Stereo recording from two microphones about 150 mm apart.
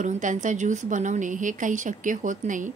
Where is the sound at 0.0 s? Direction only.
55° right (ahead or behind).